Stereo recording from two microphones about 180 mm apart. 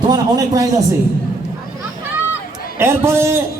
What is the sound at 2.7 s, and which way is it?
Speech, 15° right (ahead or behind).